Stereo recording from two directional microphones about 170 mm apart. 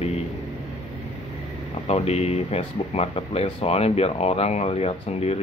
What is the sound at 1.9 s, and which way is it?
Speech, 40° left (ahead or behind).